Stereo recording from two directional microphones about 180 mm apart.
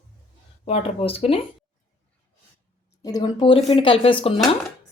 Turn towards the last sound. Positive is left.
turn(degrees=30)  # may be behind; listen again after turning